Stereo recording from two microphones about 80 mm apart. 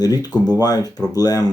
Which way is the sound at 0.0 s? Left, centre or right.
Left.